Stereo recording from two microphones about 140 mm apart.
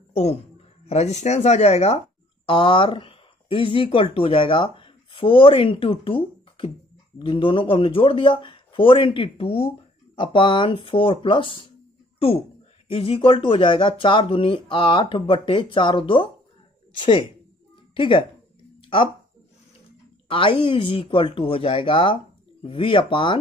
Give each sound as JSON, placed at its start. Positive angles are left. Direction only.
{"t": 0.1, "sound": "a man's voice", "side_deg": 50}
{"t": 2.4, "sound": "speech", "side_deg": 35}
{"t": 12.9, "sound": "speech", "side_deg": 40}
{"t": 17.9, "sound": "speech", "side_deg": 35}
{"t": 18.8, "sound": "a sound", "side_deg": 40}
{"t": 20.2, "sound": "speech", "side_deg": 35}